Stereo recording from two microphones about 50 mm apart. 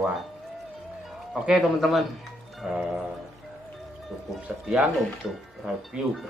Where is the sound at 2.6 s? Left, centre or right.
Centre.